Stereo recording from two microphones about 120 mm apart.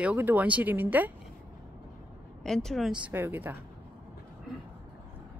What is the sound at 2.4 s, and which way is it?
Speech, 5° left (ahead or behind).